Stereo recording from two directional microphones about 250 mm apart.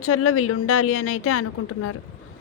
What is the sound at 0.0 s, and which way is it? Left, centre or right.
A woman's voice, left.